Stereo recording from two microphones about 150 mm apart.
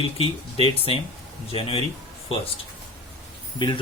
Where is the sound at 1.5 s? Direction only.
40° left (ahead or behind).